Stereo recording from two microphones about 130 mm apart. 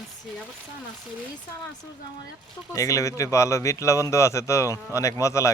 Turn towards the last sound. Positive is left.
turn(degrees=25)  # may be behind; listen again after turning